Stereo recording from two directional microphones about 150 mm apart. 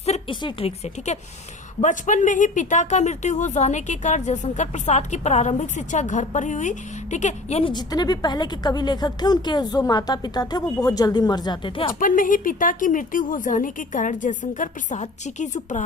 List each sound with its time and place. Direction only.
0.0 s a sound: 40° left (ahead or behind)
1.8 s speech: 55° left (ahead or behind)
7.6 s a woman's voice: 30° left (ahead or behind)
11.9 s a woman's voice: 65° left (ahead or behind)